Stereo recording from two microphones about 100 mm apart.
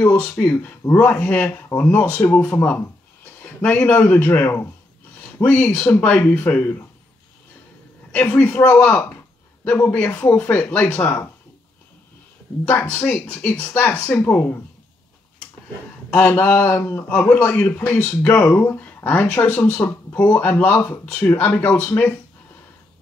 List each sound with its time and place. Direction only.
0.0 s speech: 15° left (ahead or behind)
8.1 s speech: 15° left (ahead or behind)
12.6 s speech: 15° left (ahead or behind)
16.2 s a man's voice: 20° left (ahead or behind)